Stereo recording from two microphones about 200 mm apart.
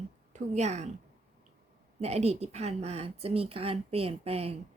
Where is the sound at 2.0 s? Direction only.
35° right (ahead or behind).